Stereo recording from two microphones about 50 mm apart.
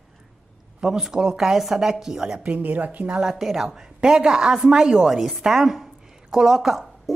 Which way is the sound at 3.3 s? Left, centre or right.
Centre.